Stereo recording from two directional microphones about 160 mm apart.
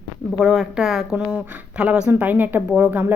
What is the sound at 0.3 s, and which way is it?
Speech, 5° right (ahead or behind).